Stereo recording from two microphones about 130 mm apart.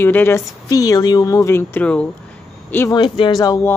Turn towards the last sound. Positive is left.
turn(degrees=30)  # may be behind; listen again after turning